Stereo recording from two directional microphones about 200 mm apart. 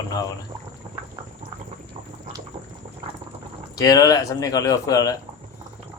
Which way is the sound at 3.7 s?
20° left (ahead or behind).